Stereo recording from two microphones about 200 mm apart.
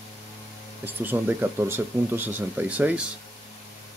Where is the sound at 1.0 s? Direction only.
10° right (ahead or behind).